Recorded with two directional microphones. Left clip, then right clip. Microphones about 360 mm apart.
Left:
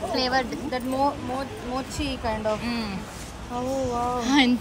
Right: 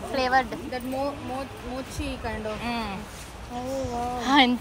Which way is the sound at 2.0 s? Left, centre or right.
Centre.